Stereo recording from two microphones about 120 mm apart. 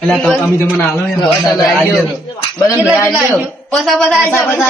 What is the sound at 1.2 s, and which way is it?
Speech, 25° left (ahead or behind).